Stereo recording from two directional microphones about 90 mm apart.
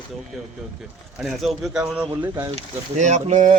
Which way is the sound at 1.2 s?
5° right (ahead or behind).